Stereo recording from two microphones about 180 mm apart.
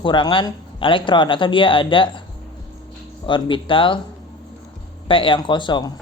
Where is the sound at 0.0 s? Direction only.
25° left (ahead or behind).